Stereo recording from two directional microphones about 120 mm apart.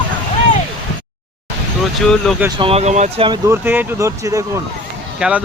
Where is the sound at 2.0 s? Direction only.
5° left (ahead or behind).